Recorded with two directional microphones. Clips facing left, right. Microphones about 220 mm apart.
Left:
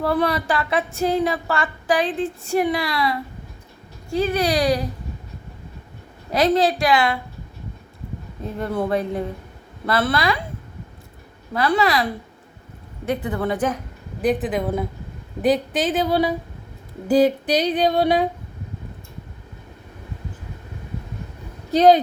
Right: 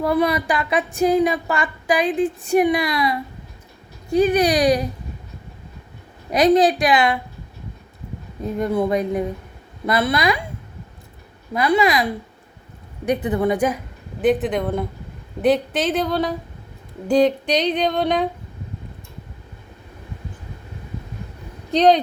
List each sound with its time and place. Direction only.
0.0 s speech: 10° right (ahead or behind)
6.3 s speech: 15° right (ahead or behind)
8.5 s speech: 10° right (ahead or behind)
11.5 s speech: 10° right (ahead or behind)
13.1 s a woman's voice: 20° right (ahead or behind); by 16.3 s 10° left (ahead or behind)
17.1 s a sound: 5° left (ahead or behind)
21.7 s a woman's voice: 5° left (ahead or behind)